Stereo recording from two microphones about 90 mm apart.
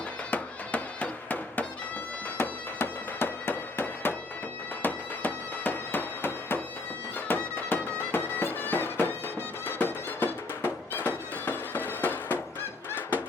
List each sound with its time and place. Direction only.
0.3 s music: 15° left (ahead or behind)
4.8 s bagpipes: 20° left (ahead or behind)
7.3 s music: 20° left (ahead or behind)